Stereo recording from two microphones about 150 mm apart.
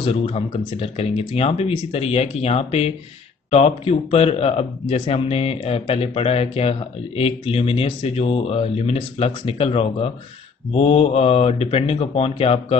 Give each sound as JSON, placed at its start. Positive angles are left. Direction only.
{"t": 0.0, "sound": "speech", "side_deg": 35}